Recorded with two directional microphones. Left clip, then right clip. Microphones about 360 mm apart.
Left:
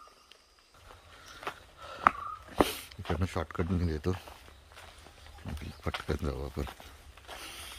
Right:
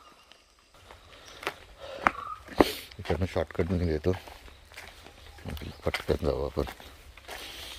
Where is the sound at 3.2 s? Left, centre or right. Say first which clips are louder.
Right 6 dB; centre.